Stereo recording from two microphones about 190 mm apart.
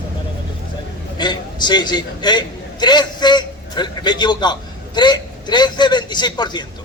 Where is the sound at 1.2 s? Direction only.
20° left (ahead or behind).